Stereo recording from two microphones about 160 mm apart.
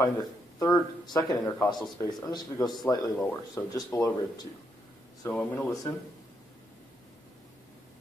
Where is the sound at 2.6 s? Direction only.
Centre (ahead or behind).